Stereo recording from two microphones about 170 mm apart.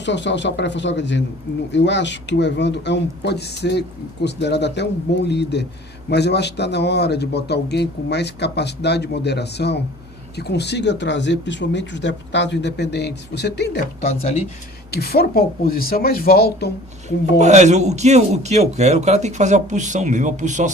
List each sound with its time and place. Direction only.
0.0 s speech: 90° left
14.0 s speech: 40° left (ahead or behind)
14.8 s speech: 70° left (ahead or behind)
17.3 s a man's voice: 45° right (ahead or behind)